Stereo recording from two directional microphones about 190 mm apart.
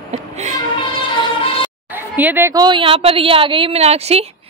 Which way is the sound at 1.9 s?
10° right (ahead or behind).